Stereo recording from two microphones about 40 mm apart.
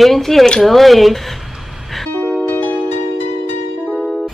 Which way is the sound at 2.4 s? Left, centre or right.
Left.